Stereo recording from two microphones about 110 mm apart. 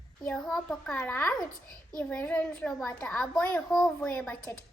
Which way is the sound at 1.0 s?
20° left (ahead or behind).